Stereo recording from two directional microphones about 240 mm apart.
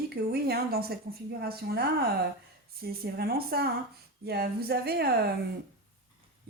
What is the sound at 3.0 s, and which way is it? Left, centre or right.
A woman's voice, right.